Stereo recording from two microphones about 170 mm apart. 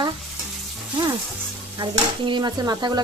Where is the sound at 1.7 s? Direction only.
25° right (ahead or behind).